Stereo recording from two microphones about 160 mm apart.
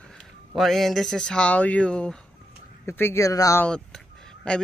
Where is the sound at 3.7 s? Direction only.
5° left (ahead or behind).